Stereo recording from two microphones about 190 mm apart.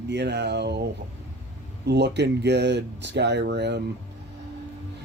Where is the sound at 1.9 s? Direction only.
65° right (ahead or behind).